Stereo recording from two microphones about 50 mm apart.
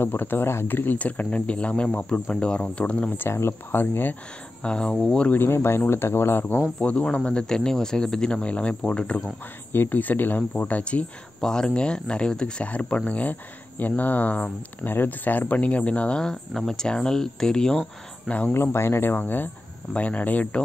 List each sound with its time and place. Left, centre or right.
0.0 s speech: left
0.9 s speech: left
3.1 s speech: left
3.8 s speech: left
4.6 s speech: centre
5.3 s speech: left
6.8 s speech: left
9.7 s speech: left
10.5 s speech: left
11.4 s speech: centre
12.6 s speech: left
16.3 s speech: centre
18.5 s speech: left
19.1 s speech: left